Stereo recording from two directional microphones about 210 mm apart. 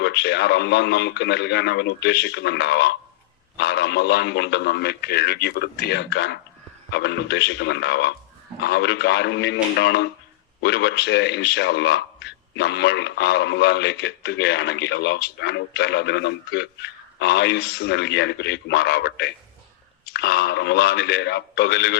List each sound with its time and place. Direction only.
0.0 s a man's voice: 55° left (ahead or behind)